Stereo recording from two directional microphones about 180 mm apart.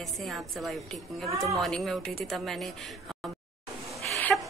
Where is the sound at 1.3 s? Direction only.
15° right (ahead or behind).